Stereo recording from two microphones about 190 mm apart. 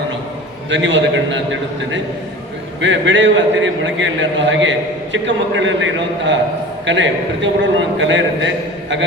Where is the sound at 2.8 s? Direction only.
75° right (ahead or behind).